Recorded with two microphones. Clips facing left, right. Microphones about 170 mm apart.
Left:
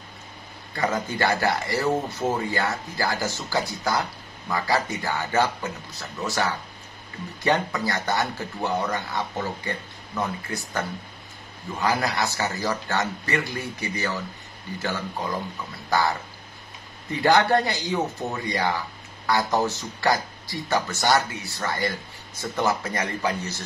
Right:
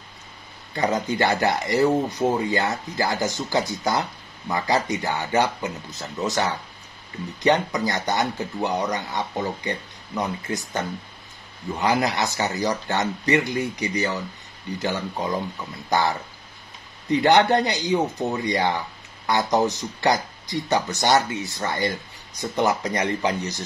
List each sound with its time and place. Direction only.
0.7 s speech: 20° right (ahead or behind)
11.8 s speech: 20° right (ahead or behind)